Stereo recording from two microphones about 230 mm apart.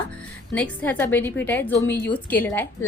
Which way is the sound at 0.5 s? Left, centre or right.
Centre.